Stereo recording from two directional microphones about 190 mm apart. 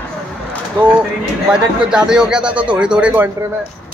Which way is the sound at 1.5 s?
5° right (ahead or behind).